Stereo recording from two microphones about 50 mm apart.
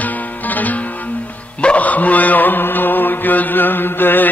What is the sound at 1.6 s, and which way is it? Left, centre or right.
Dog, left.